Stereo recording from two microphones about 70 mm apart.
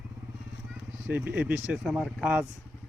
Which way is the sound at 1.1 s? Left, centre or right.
Right.